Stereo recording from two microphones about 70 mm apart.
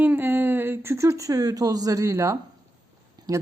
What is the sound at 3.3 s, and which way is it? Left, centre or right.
Speech, right.